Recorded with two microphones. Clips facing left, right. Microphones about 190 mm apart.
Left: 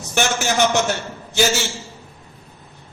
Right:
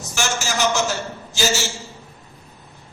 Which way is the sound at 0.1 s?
60° left (ahead or behind).